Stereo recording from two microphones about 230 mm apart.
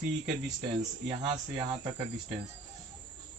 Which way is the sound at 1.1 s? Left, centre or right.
Right.